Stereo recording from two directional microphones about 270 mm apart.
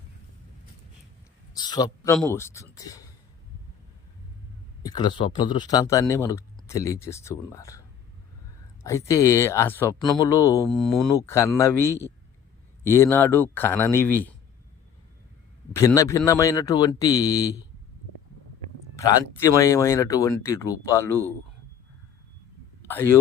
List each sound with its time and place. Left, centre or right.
1.5 s a man's voice: centre
4.8 s speech: centre
8.8 s speech: centre
15.7 s speech: centre
18.9 s speech: centre
22.9 s speech: centre